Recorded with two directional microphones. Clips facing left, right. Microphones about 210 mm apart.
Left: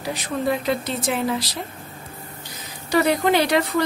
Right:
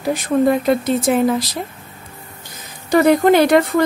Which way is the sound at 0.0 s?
50° right (ahead or behind).